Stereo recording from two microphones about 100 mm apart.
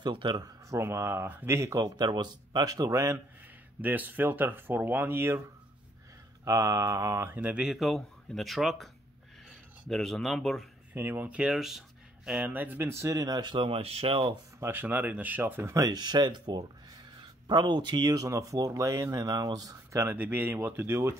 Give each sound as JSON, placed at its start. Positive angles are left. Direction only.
{"t": 0.0, "sound": "speech", "side_deg": -50}
{"t": 0.4, "sound": "speech", "side_deg": -30}
{"t": 2.0, "sound": "speech", "side_deg": -45}
{"t": 3.8, "sound": "speech", "side_deg": -15}
{"t": 6.4, "sound": "speech", "side_deg": -30}
{"t": 7.7, "sound": "speech", "side_deg": 0}
{"t": 10.9, "sound": "speech", "side_deg": -20}
{"t": 14.6, "sound": "speech", "side_deg": -20}
{"t": 20.2, "sound": "speech", "side_deg": -20}